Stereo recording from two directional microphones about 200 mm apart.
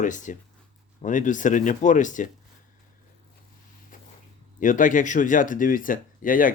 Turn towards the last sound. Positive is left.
turn(degrees=40)  # may be behind; listen again after turning